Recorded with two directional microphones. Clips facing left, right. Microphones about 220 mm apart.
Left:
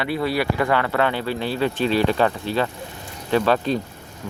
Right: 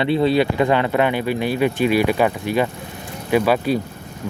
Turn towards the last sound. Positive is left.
turn(degrees=-10)  # may be behind; listen again after turning